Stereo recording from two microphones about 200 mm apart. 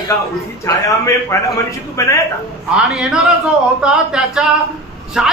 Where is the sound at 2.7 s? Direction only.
5° right (ahead or behind).